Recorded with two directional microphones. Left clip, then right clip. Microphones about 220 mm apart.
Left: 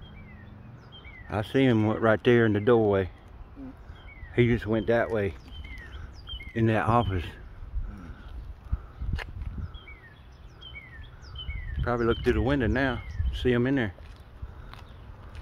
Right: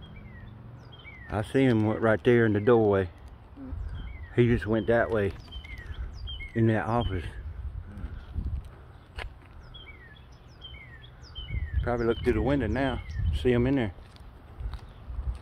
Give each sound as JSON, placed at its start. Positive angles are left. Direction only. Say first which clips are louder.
{"t": 1.3, "sound": "speech", "louder": "left 1 dB", "side_deg": 10}
{"t": 4.3, "sound": "speech", "louder": "even", "side_deg": 5}
{"t": 6.5, "sound": "speech", "louder": "left 3 dB", "side_deg": 25}
{"t": 11.8, "sound": "speech", "louder": "left 1 dB", "side_deg": 15}